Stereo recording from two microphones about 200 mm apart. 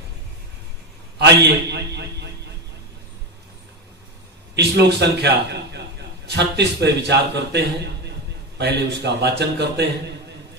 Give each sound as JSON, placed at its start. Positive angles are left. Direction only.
{"t": 1.2, "sound": "a man's voice", "side_deg": -60}
{"t": 4.6, "sound": "a man's voice", "side_deg": -55}